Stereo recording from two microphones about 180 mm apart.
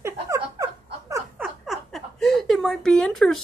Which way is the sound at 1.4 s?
Centre (ahead or behind).